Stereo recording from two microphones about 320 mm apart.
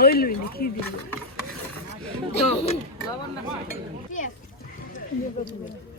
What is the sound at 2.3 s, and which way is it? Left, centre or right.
Speech, centre.